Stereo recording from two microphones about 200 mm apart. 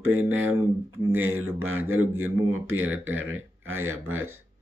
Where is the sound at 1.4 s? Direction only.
90° right.